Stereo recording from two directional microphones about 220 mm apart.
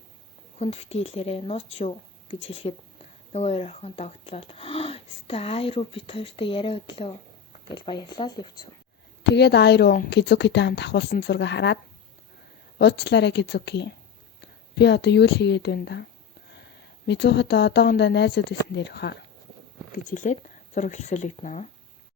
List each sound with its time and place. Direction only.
0.6 s speech: 30° left (ahead or behind)
9.3 s speech: 50° left (ahead or behind)
12.8 s speech: 50° left (ahead or behind)
17.1 s speech: 50° left (ahead or behind)
19.9 s speech: 35° left (ahead or behind)